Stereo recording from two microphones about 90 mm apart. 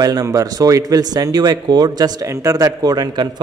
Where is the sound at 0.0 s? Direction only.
40° right (ahead or behind).